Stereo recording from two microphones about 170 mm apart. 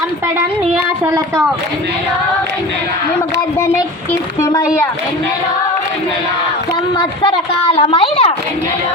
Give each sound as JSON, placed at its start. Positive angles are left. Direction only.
{"t": 4.4, "sound": "speech", "side_deg": 15}
{"t": 7.0, "sound": "a woman's voice", "side_deg": 30}